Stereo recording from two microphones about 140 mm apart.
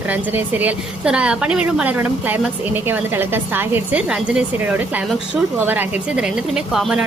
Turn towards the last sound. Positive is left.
turn(degrees=-5)  # may be behind; listen again after turning